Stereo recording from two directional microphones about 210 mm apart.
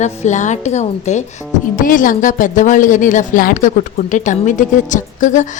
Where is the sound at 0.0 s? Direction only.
35° left (ahead or behind).